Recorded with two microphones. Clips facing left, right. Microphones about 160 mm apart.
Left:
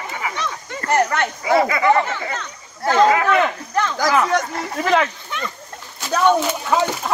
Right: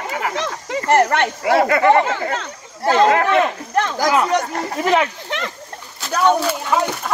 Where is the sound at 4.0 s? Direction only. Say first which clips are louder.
Even; 15° right (ahead or behind).